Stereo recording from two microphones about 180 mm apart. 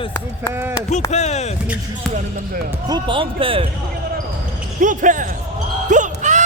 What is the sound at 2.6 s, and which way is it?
Speech, 20° right (ahead or behind).